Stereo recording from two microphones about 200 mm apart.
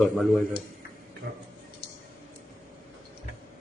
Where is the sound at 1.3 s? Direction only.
50° right (ahead or behind).